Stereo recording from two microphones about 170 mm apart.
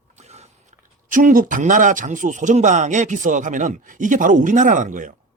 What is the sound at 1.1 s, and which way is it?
Speech, 55° right (ahead or behind).